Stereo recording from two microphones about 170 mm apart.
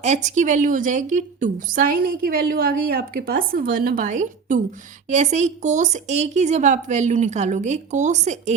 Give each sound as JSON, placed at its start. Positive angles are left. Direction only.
{"t": 0.0, "sound": "a woman's voice", "side_deg": -45}